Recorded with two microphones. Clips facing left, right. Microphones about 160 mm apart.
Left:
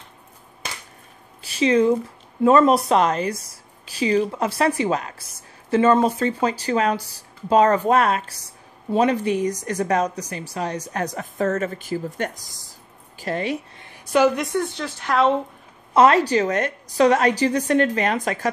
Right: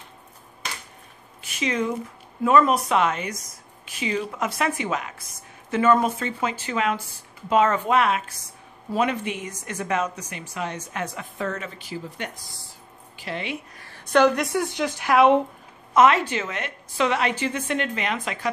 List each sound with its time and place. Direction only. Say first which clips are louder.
1.4 s a woman's voice: left 8 dB; 30° left (ahead or behind)
13.7 s a sound: left 1 dB; 20° left (ahead or behind)
14.1 s a woman's voice: left 1 dB; 5° left (ahead or behind); by 15.4 s 15° right (ahead or behind)
15.9 s speech: left 3 dB; 35° left (ahead or behind)